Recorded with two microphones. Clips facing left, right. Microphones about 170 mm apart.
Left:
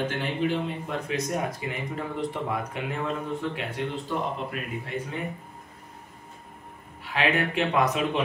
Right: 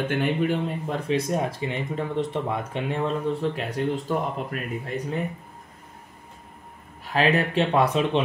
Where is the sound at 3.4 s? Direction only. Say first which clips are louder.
Right 4 dB; 40° right (ahead or behind).